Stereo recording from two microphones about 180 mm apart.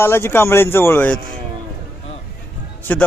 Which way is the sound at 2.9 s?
10° left (ahead or behind).